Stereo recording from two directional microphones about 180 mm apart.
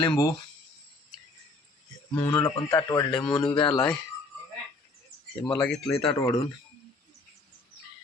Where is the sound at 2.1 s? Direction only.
15° left (ahead or behind).